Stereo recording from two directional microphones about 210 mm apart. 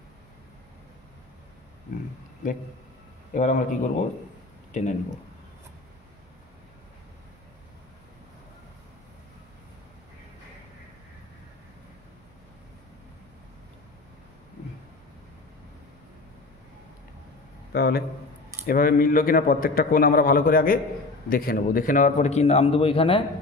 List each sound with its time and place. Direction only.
3.3 s a man's voice: 35° left (ahead or behind)
17.7 s a man's voice: 50° left (ahead or behind); by 23.2 s 25° left (ahead or behind)